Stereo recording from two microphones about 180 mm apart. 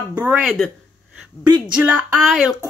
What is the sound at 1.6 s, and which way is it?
Speech, 5° right (ahead or behind).